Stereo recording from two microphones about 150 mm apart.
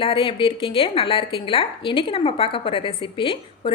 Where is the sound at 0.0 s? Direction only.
35° left (ahead or behind).